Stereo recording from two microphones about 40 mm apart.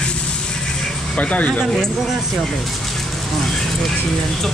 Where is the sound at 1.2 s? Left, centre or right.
Left.